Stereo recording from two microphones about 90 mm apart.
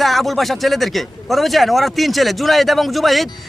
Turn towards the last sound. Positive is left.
turn(degrees=0)  # may be behind; listen again after turning